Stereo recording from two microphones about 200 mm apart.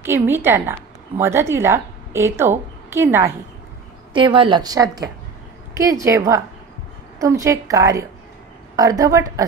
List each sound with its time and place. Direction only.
0.0 s a woman's voice: 10° right (ahead or behind)
4.1 s a woman's voice: 25° right (ahead or behind)